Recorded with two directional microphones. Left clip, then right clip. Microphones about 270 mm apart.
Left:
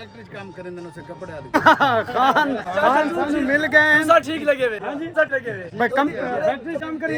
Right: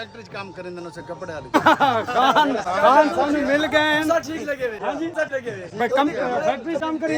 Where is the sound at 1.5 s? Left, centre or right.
Centre.